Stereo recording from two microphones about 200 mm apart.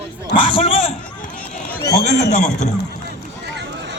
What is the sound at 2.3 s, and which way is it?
Speech, 35° left (ahead or behind).